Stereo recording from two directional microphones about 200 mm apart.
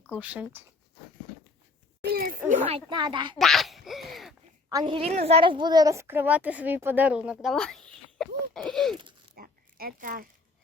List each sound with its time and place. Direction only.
0.1 s a woman's voice: 5° right (ahead or behind)
2.0 s a sound: 45° right (ahead or behind)
2.6 s speech: 25° right (ahead or behind)
3.3 s speech: centre (ahead or behind)
4.7 s a woman's voice: 20° right (ahead or behind); by 7.8 s centre (ahead or behind)
8.2 s a sound: centre (ahead or behind)
9.3 s zipper: 50° right (ahead or behind)